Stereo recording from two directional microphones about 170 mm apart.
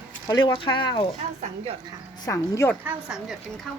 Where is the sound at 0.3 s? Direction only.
25° left (ahead or behind).